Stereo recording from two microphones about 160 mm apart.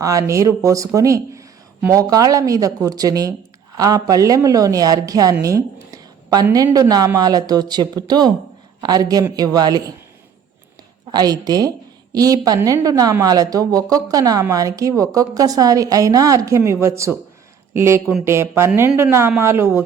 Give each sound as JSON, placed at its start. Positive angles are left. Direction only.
{"t": 0.0, "sound": "speech", "side_deg": -20}
{"t": 11.1, "sound": "speech", "side_deg": -25}